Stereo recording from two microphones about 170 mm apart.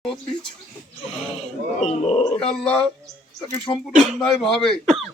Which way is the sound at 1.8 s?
40° left (ahead or behind).